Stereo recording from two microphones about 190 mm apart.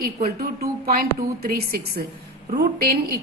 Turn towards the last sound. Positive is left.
turn(degrees=-55)  # may be behind; listen again after turning